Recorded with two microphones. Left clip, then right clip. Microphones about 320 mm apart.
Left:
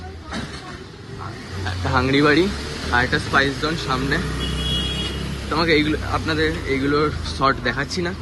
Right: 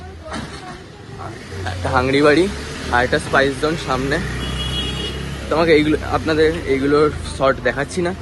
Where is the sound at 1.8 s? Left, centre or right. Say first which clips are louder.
Right 3 dB; centre.